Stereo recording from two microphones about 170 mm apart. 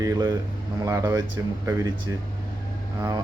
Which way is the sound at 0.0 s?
25° right (ahead or behind).